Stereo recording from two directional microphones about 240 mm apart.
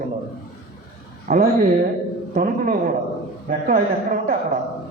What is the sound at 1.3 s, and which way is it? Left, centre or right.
Speech, right.